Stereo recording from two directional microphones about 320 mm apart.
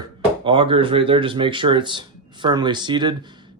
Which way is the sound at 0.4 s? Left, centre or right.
Centre.